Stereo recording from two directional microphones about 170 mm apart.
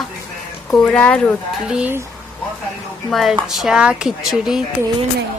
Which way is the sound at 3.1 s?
Centre (ahead or behind).